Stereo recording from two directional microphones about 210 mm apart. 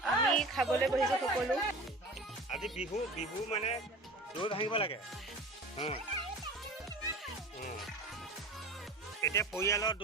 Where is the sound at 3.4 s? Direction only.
30° left (ahead or behind).